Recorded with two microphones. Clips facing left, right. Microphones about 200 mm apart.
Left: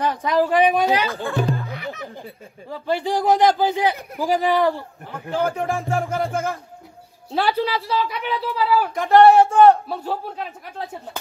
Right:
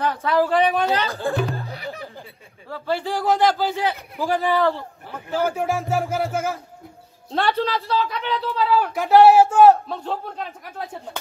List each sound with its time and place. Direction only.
0.0 s a man's voice: 15° left (ahead or behind)
1.6 s speech: 35° right (ahead or behind)
2.7 s a man's voice: 15° left (ahead or behind)
5.6 s music: centre (ahead or behind)
7.2 s a man's voice: 5° left (ahead or behind)
9.8 s a man's voice: 10° left (ahead or behind)